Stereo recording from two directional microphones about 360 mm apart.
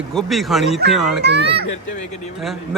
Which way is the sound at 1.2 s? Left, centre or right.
Right.